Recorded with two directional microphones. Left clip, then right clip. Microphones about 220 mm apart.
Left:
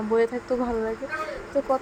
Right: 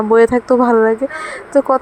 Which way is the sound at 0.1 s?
30° right (ahead or behind).